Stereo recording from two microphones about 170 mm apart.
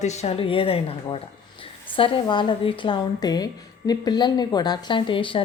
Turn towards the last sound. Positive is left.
turn(degrees=30)  # may be behind; listen again after turning